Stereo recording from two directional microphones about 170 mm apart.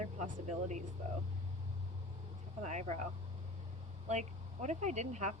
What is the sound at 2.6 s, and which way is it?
Speech, 45° right (ahead or behind).